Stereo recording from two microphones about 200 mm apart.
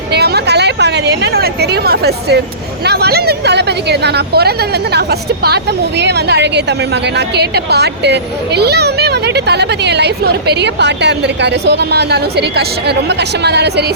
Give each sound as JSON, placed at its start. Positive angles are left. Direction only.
{"t": 0.1, "sound": "a child's voice", "side_deg": -55}